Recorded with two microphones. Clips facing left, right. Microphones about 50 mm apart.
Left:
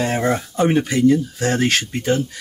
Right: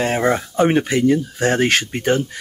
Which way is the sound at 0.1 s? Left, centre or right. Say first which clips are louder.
Right 2 dB; centre.